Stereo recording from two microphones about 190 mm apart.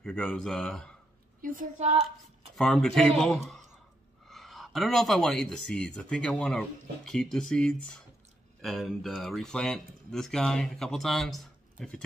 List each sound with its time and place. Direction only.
0.0 s speech: 5° left (ahead or behind)
1.4 s a woman's voice: 45° right (ahead or behind)
2.5 s speech: 5° left (ahead or behind)